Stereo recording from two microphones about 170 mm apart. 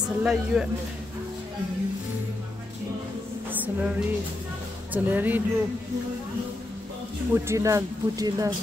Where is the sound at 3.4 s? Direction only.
10° right (ahead or behind).